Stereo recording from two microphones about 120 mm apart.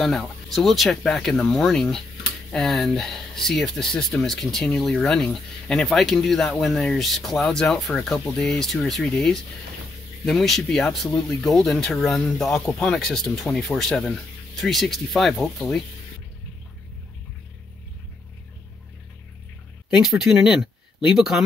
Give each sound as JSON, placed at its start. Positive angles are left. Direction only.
{"t": 0.0, "sound": "speech", "side_deg": 0}
{"t": 19.9, "sound": "speech", "side_deg": -5}